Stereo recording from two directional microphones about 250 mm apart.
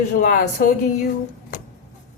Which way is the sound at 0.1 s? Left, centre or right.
Left.